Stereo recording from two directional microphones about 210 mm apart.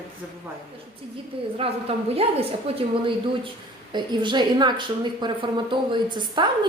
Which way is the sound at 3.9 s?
20° right (ahead or behind).